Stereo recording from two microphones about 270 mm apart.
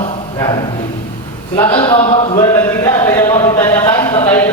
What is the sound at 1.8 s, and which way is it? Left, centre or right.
Speech, centre.